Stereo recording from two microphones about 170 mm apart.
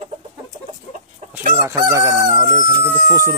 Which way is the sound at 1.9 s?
15° right (ahead or behind).